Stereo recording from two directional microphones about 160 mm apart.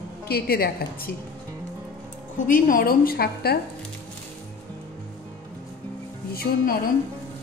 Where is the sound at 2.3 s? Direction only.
55° left (ahead or behind).